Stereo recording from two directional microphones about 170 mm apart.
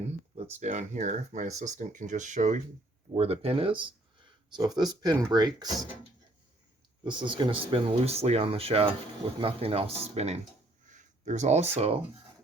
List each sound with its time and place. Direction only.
0.6 s speech: 45° right (ahead or behind); by 5.6 s 25° right (ahead or behind)
7.0 s speech: 25° right (ahead or behind)